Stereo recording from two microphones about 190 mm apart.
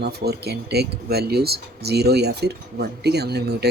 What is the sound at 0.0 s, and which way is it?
Speech, 60° right (ahead or behind).